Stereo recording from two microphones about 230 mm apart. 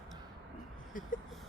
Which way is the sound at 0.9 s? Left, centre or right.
Left.